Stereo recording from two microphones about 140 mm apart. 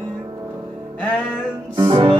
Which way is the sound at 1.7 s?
35° right (ahead or behind).